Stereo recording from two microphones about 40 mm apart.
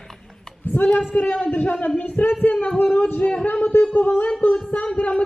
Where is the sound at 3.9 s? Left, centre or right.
Left.